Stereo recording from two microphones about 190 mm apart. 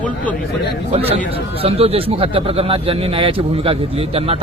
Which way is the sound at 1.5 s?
30° right (ahead or behind).